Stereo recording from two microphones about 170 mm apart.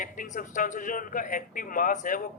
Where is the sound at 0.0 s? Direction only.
50° left (ahead or behind).